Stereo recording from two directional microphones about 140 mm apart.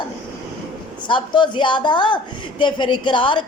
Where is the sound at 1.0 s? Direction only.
35° left (ahead or behind).